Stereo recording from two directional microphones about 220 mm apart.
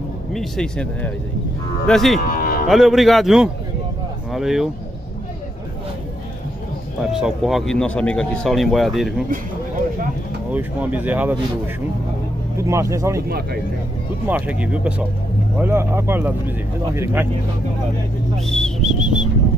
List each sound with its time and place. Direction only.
0.3 s speech: centre (ahead or behind)
2.3 s music: 40° left (ahead or behind)
2.7 s speech: centre (ahead or behind)
7.1 s speech: 5° right (ahead or behind)
10.5 s speech: 5° right (ahead or behind)
14.2 s speech: 5° right (ahead or behind)
18.4 s music: centre (ahead or behind)